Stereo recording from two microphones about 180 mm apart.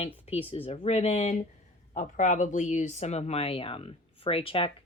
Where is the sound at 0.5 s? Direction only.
35° left (ahead or behind).